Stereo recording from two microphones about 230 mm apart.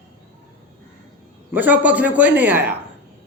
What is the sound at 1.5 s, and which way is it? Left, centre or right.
Speech, centre.